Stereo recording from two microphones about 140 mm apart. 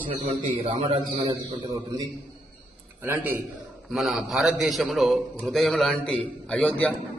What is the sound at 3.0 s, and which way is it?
Speech, 15° right (ahead or behind).